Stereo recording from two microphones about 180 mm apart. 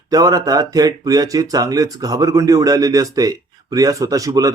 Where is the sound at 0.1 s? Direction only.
20° right (ahead or behind).